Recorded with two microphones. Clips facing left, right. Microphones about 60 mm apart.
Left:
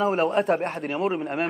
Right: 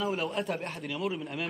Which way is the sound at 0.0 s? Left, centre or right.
Left.